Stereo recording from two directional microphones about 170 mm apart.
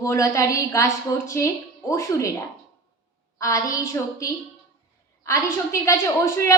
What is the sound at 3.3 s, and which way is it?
A woman's voice, 20° left (ahead or behind).